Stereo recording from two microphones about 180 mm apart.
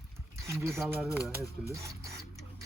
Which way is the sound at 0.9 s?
10° right (ahead or behind).